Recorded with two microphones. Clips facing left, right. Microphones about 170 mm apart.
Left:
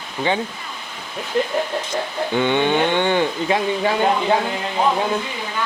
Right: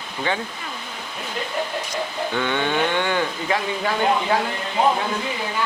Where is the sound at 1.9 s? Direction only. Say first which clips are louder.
Left 3 dB; 20° left (ahead or behind).